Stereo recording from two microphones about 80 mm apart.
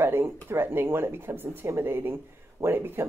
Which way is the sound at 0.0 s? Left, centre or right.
Right.